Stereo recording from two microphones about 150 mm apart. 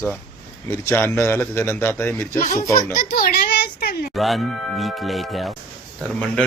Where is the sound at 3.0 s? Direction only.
80° left.